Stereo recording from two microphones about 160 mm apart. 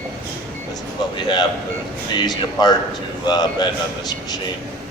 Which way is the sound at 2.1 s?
25° left (ahead or behind).